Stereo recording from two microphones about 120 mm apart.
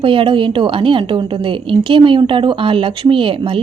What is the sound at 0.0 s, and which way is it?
A woman's voice, 45° right (ahead or behind).